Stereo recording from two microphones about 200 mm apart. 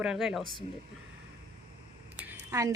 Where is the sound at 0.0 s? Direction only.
5° right (ahead or behind).